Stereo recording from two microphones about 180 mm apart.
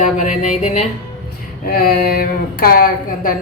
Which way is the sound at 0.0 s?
45° left (ahead or behind).